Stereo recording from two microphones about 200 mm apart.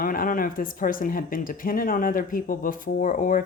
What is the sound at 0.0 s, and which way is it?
Speech, 45° left (ahead or behind).